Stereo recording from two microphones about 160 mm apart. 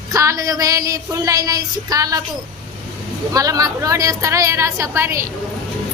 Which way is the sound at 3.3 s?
20° right (ahead or behind).